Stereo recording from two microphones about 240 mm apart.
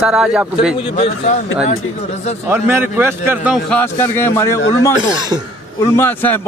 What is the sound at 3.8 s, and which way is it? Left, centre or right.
Speech, centre.